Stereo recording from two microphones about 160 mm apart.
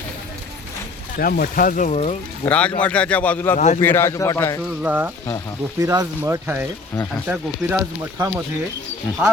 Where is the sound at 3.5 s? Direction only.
45° left (ahead or behind).